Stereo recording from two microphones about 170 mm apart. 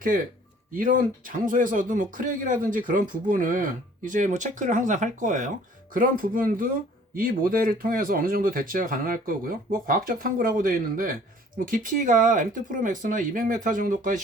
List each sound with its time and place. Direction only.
0.1 s speech: 55° right (ahead or behind)